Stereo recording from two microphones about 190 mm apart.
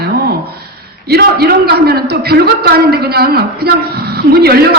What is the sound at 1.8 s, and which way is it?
A man's voice, 55° right (ahead or behind).